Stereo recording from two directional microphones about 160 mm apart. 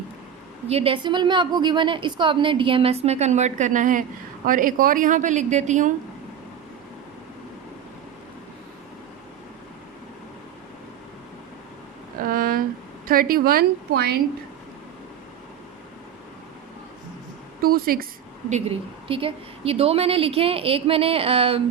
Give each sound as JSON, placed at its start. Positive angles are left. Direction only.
{"t": 0.7, "sound": "a woman's voice", "side_deg": -35}
{"t": 12.1, "sound": "a sound", "side_deg": -60}
{"t": 13.1, "sound": "a woman's voice", "side_deg": -65}
{"t": 17.6, "sound": "a woman's voice", "side_deg": -70}
{"t": 19.0, "sound": "a woman's voice", "side_deg": -35}